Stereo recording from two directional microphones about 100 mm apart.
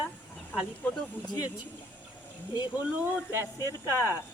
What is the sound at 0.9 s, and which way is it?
Speech, 10° left (ahead or behind).